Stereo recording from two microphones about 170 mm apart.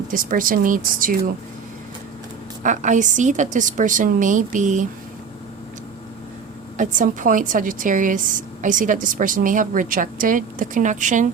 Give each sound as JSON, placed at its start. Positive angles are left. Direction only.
{"t": 0.1, "sound": "a woman's voice", "side_deg": -55}
{"t": 2.6, "sound": "a woman's voice", "side_deg": -45}
{"t": 6.7, "sound": "a woman's voice", "side_deg": -50}